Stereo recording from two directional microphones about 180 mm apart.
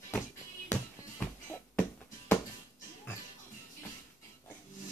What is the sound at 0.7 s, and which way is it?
Music, 10° left (ahead or behind).